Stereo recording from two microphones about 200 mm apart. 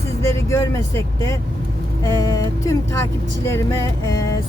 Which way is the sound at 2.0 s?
15° left (ahead or behind).